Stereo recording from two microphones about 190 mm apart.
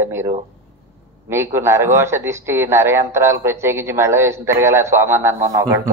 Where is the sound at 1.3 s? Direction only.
15° right (ahead or behind).